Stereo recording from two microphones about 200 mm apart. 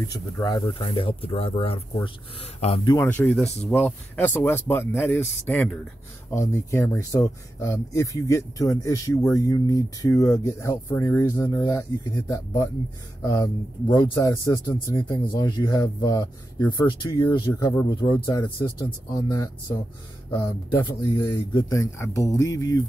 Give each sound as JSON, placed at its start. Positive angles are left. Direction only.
{"t": 0.1, "sound": "speech", "side_deg": 20}
{"t": 2.9, "sound": "speech", "side_deg": 10}
{"t": 20.8, "sound": "speech", "side_deg": 20}